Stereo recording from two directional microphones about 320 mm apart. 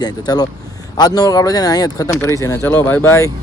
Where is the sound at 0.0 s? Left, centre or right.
Centre.